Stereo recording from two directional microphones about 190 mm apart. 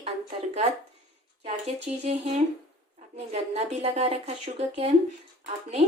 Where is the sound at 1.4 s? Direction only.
35° right (ahead or behind).